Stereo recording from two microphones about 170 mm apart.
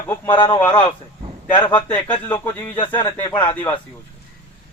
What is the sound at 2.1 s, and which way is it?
A man's voice, 25° left (ahead or behind).